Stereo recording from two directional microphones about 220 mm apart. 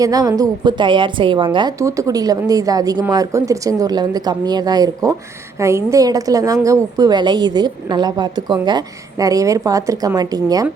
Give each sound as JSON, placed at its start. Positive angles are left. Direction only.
{"t": 0.0, "sound": "a woman's voice", "side_deg": -15}